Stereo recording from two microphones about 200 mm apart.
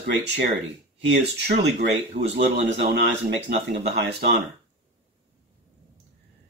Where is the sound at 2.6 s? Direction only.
60° right (ahead or behind).